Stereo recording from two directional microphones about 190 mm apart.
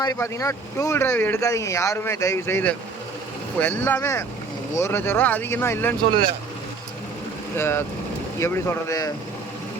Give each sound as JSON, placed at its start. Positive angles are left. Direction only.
{"t": 0.0, "sound": "speech", "side_deg": 15}
{"t": 7.5, "sound": "speech", "side_deg": 10}